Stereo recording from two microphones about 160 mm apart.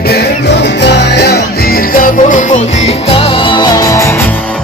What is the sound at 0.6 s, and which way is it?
Music, 90° left.